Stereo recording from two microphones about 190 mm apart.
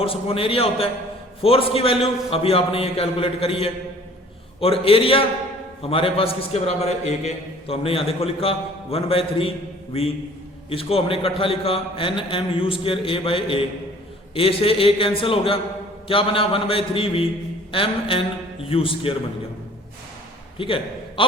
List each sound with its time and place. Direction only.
0.0 s a man's voice: 30° left (ahead or behind)
10.7 s a man's voice: 30° left (ahead or behind)
20.6 s a man's voice: 25° left (ahead or behind)